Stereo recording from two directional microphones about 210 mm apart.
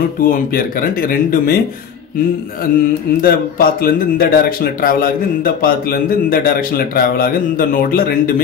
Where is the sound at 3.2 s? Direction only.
45° left (ahead or behind).